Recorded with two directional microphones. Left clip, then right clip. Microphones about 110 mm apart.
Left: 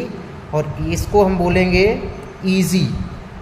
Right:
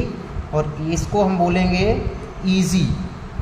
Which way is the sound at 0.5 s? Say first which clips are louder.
Left 1 dB; 90° left.